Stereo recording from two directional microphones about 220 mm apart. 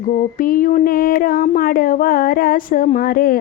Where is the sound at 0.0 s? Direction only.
40° left (ahead or behind).